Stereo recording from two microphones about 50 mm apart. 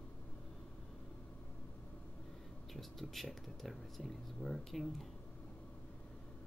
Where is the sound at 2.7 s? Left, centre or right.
Centre.